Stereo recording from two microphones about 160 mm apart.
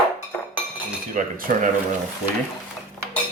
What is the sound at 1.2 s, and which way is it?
Speech, 55° right (ahead or behind).